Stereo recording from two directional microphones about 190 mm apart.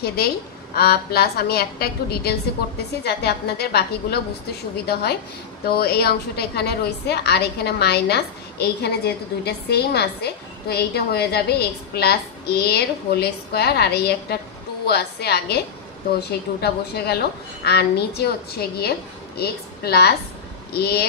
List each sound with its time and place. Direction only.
0.0 s a woman's voice: 55° left (ahead or behind)